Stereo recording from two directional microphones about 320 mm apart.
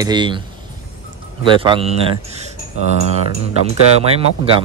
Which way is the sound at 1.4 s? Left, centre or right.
Centre.